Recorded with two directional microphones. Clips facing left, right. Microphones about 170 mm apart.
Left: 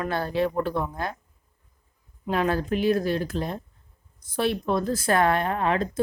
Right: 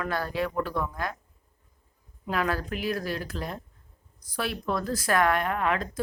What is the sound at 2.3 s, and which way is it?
Speech, 25° left (ahead or behind).